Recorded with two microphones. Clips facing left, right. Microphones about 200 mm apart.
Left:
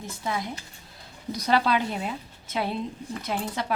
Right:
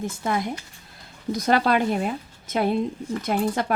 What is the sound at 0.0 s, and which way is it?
A woman's voice, 55° right (ahead or behind).